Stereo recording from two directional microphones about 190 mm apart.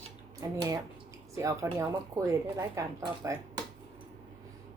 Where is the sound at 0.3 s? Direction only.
20° right (ahead or behind).